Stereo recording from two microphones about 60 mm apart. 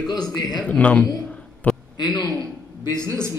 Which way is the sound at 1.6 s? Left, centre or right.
Left.